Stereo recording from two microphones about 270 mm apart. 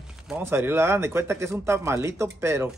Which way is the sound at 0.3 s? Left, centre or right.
Centre.